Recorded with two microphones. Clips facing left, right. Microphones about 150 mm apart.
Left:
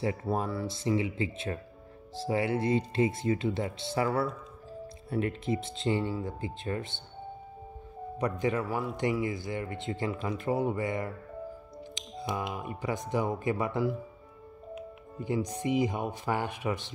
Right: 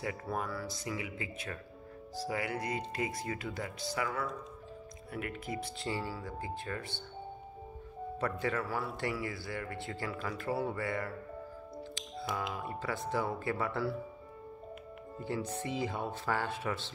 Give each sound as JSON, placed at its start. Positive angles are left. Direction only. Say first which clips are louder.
{"t": 0.0, "sound": "a man's voice", "louder": "left 6 dB", "side_deg": 25}
{"t": 8.2, "sound": "a man's voice", "louder": "left 5 dB", "side_deg": 15}
{"t": 11.9, "sound": "music", "louder": "left 4 dB", "side_deg": 20}
{"t": 12.5, "sound": "speech", "louder": "left 3 dB", "side_deg": 15}
{"t": 15.1, "sound": "speech", "louder": "left 5 dB", "side_deg": 15}